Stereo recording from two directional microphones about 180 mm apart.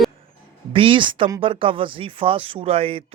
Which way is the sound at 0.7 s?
30° right (ahead or behind).